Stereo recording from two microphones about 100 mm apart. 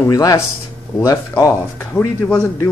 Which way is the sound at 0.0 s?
35° left (ahead or behind).